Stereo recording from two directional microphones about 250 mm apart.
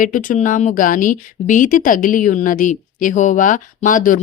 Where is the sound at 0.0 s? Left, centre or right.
Left.